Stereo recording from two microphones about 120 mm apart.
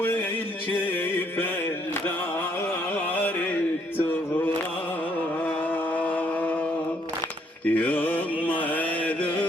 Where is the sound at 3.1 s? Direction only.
15° left (ahead or behind).